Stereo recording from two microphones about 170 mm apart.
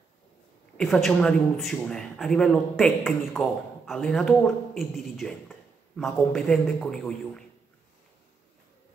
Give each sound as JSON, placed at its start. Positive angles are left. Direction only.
{"t": 0.7, "sound": "a man's voice", "side_deg": 0}